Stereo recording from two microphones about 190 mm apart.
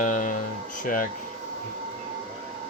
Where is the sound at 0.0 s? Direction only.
45° left (ahead or behind).